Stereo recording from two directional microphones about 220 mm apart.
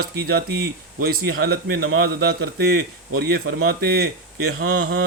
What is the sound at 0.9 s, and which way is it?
Speech, 45° right (ahead or behind).